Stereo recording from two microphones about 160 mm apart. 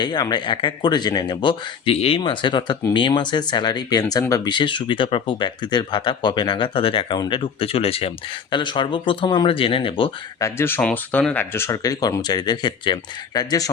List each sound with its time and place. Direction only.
0.0 s speech: 25° left (ahead or behind)
10.4 s speech: 15° left (ahead or behind)